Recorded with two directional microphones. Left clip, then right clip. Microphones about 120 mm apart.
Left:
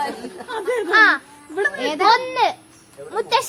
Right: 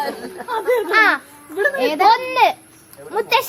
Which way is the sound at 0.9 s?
70° right (ahead or behind).